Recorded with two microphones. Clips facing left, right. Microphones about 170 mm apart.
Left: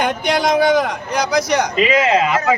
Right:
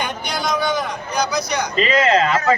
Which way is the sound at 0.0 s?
90° left.